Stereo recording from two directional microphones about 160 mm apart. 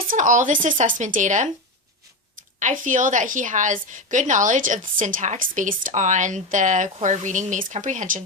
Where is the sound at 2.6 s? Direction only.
50° right (ahead or behind).